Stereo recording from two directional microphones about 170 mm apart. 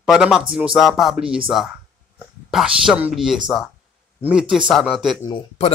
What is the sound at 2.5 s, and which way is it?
Speech, 5° right (ahead or behind).